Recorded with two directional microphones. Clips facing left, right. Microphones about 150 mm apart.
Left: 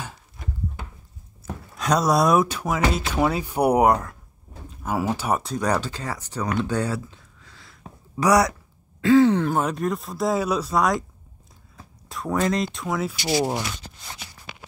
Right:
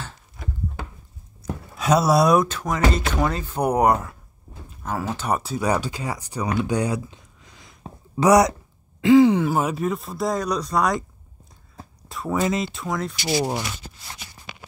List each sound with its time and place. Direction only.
1.4 s a sound: 5° right (ahead or behind)
2.4 s speech: 10° left (ahead or behind)
3.9 s speech: 5° right (ahead or behind)
4.8 s speech: 10° left (ahead or behind)
5.4 s speech: 5° right (ahead or behind)
12.1 s speech: centre (ahead or behind)